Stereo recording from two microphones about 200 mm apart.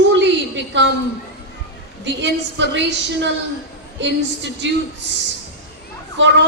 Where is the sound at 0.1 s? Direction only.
65° right (ahead or behind).